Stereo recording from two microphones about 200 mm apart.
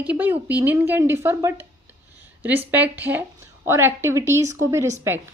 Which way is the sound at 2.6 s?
10° right (ahead or behind).